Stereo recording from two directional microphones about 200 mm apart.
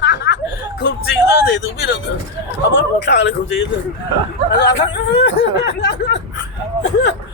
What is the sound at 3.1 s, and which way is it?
Speech, 60° left (ahead or behind).